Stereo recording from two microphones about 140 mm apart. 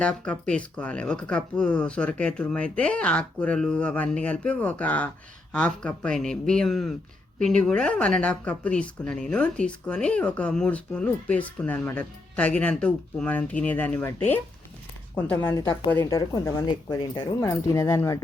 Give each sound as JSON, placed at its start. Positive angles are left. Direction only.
{"t": 0.0, "sound": "speech", "side_deg": 5}